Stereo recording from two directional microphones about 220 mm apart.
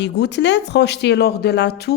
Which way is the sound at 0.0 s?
50° left (ahead or behind).